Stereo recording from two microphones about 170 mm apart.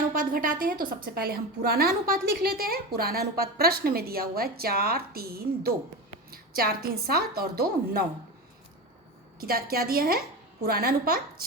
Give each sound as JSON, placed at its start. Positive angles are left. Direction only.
{"t": 0.1, "sound": "a woman's voice", "side_deg": -55}
{"t": 9.4, "sound": "a woman's voice", "side_deg": -65}